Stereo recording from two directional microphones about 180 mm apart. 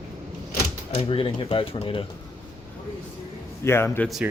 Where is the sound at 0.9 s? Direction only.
30° left (ahead or behind).